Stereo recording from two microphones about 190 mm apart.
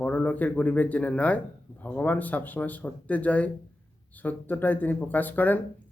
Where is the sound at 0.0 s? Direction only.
5° left (ahead or behind).